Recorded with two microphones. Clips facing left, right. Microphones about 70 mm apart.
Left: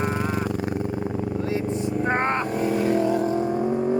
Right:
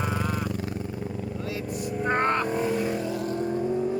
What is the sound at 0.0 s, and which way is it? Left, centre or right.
Vehicle, left.